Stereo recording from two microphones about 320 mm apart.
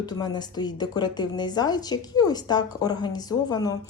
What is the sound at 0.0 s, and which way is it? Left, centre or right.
A woman's voice, centre.